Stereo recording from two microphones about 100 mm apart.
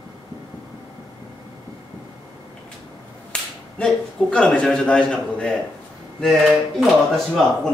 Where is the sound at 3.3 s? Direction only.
10° left (ahead or behind).